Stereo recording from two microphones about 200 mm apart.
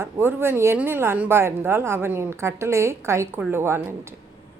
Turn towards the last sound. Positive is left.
turn(degrees=-10)  # may be behind; listen again after turning